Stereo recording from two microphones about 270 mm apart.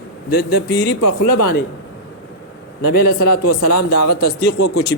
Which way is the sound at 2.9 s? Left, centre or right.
Left.